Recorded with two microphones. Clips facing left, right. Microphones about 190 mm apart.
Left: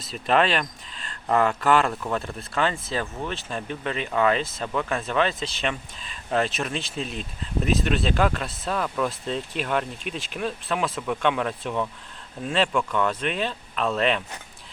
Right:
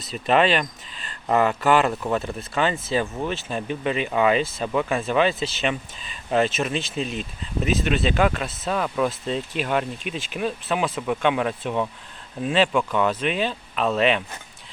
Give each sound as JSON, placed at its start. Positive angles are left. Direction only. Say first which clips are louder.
{"t": 0.0, "sound": "speech", "louder": "right 2 dB", "side_deg": 0}